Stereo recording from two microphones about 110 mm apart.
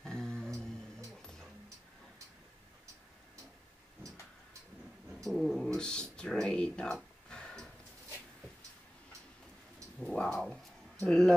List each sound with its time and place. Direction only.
0.0 s a sound: 5° left (ahead or behind)
0.5 s music: 30° right (ahead or behind)
1.1 s dog: 5° left (ahead or behind)
5.2 s speech: centre (ahead or behind)
7.2 s a sound: 5° left (ahead or behind)
9.9 s cat: 5° left (ahead or behind)
11.1 s speech: 5° left (ahead or behind)